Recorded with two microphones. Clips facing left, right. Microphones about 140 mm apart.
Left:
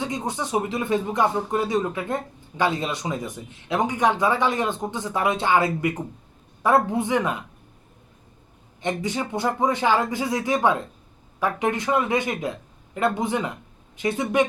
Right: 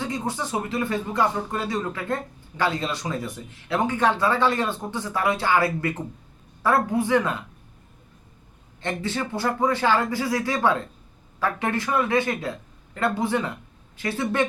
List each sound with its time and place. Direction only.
0.0 s speech: 20° left (ahead or behind)
8.8 s speech: 15° left (ahead or behind)